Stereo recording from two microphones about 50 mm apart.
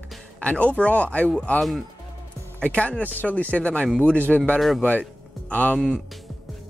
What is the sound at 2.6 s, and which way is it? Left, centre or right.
Speech, left.